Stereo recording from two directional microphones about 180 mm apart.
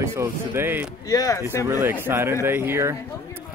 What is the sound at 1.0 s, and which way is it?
Speech, 20° left (ahead or behind).